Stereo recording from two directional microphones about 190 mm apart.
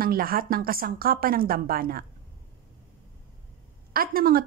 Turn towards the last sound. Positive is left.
turn(degrees=-50)  # may be behind; listen again after turning